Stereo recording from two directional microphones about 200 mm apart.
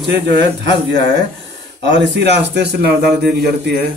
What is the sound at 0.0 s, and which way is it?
Speech, 60° right (ahead or behind).